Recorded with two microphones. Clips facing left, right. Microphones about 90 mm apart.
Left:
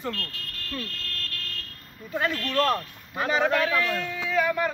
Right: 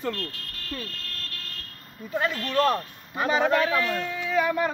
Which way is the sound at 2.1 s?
15° right (ahead or behind).